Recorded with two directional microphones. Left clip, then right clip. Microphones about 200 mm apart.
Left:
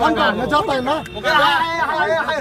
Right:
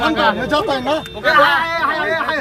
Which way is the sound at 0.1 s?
15° left (ahead or behind).